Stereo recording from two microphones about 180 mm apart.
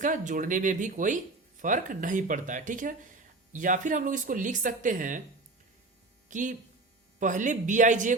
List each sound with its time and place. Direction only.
0.0 s speech: 45° right (ahead or behind)
6.3 s speech: 45° right (ahead or behind)